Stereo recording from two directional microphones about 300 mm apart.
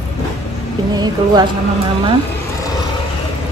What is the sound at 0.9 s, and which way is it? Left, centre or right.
Speech, centre.